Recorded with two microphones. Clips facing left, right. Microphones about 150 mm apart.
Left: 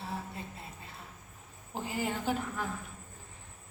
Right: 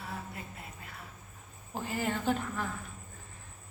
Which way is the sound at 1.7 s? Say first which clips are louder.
Right 1 dB; 15° left (ahead or behind).